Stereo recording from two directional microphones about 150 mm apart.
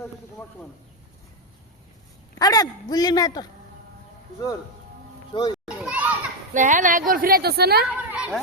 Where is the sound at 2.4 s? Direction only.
25° left (ahead or behind).